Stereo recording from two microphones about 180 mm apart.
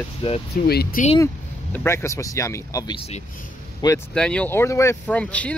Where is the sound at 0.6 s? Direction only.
60° left (ahead or behind).